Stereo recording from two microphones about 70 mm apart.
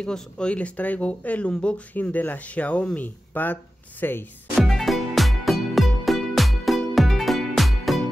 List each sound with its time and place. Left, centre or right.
0.0 s speech: centre; by 4.3 s left
4.6 s music: centre